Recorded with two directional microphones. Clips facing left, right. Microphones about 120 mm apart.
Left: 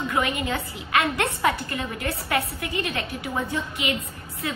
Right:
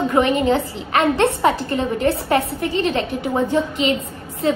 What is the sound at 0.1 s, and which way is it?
A woman's voice, 35° right (ahead or behind).